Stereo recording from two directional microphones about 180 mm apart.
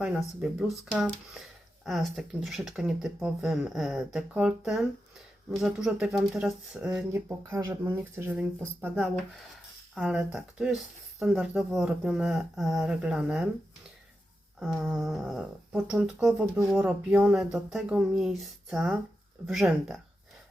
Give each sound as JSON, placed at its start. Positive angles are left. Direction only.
{"t": 0.0, "sound": "speech", "side_deg": -5}
{"t": 14.6, "sound": "speech", "side_deg": 0}